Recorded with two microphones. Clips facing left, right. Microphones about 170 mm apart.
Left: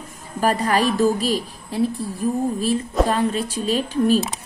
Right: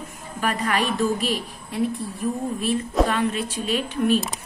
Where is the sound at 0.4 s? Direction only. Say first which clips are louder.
Left 5 dB; 35° left (ahead or behind).